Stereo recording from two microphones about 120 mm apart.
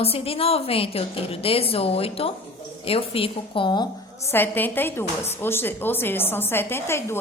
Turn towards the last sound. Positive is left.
turn(degrees=20)  # may be behind; listen again after turning